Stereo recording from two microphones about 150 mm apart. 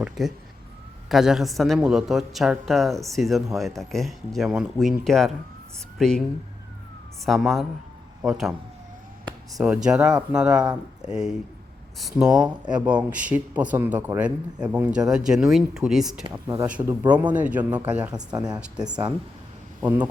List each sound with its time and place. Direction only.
0.0 s speech: centre (ahead or behind)
7.3 s speech: centre (ahead or behind)
9.6 s a man's voice: 5° right (ahead or behind)
18.1 s speech: 25° right (ahead or behind)